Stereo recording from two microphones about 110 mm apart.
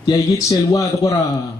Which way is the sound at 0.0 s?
30° left (ahead or behind).